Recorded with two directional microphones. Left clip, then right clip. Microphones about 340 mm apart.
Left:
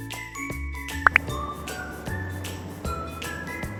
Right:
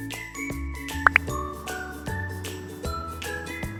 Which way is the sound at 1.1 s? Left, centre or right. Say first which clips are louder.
Even; centre.